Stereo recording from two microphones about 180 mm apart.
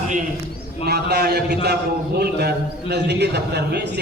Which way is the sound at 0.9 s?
60° right (ahead or behind).